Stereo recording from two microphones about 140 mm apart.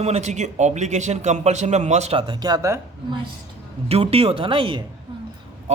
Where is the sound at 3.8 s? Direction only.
45° right (ahead or behind).